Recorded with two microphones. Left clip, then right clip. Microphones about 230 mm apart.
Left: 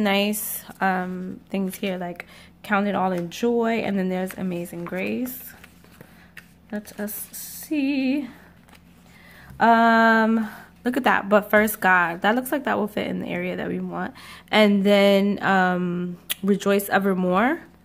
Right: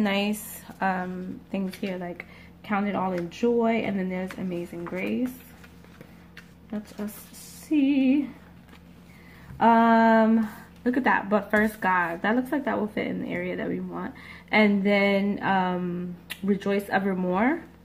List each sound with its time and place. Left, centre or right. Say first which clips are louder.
0.0 s speech: left 5 dB; left
7.0 s speech: left 5 dB; left
9.6 s speech: left 3 dB; left